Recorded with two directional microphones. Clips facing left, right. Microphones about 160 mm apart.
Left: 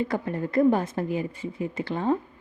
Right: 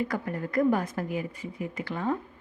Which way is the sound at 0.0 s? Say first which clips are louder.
Left 3 dB; 25° left (ahead or behind).